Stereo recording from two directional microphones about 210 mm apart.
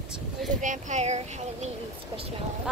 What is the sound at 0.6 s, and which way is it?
Speech, 35° right (ahead or behind).